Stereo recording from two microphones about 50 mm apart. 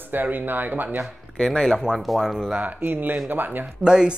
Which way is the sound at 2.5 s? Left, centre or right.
Right.